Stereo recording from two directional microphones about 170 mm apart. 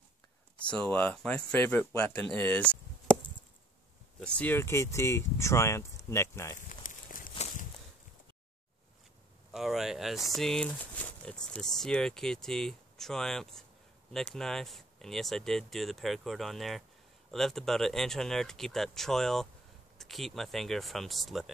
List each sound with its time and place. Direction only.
0.7 s speech: 5° left (ahead or behind)
4.2 s speech: 10° left (ahead or behind)
6.7 s a sound: 50° left (ahead or behind)
9.5 s speech: centre (ahead or behind)